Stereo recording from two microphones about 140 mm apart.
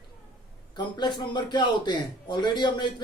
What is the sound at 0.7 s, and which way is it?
A man's voice, 30° left (ahead or behind).